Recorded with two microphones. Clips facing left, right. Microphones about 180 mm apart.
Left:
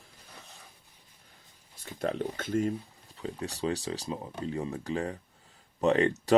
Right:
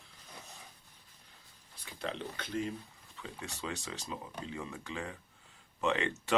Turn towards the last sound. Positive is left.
turn(degrees=40)  # may be behind; listen again after turning